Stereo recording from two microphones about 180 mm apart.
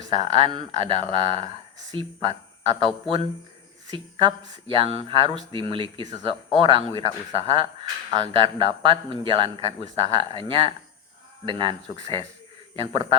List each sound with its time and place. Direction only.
0.1 s speech: 30° right (ahead or behind)